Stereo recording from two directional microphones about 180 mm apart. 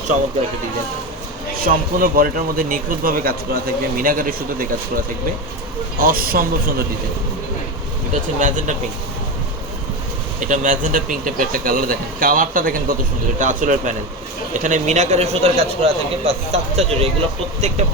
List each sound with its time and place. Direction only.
1.6 s a man's voice: 50° right (ahead or behind)
6.0 s a man's voice: 55° right (ahead or behind)
8.1 s a man's voice: 45° right (ahead or behind)
10.4 s a man's voice: 45° right (ahead or behind)